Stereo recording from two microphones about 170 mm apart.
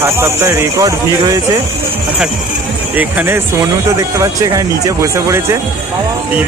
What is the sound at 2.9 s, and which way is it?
Speech, 10° right (ahead or behind).